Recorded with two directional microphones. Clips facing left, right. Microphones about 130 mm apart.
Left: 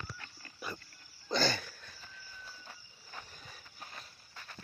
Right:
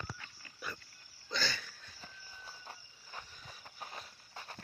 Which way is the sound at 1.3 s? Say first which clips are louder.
Left 7 dB; 45° left (ahead or behind).